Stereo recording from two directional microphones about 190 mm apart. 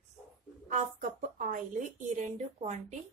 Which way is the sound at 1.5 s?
40° right (ahead or behind).